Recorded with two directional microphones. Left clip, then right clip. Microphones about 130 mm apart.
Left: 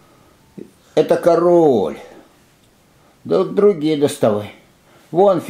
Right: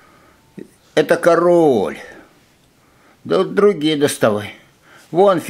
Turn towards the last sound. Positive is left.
turn(degrees=-20)  # may be behind; listen again after turning